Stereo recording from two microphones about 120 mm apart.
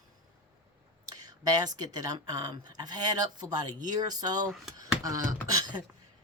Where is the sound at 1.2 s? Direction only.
35° right (ahead or behind).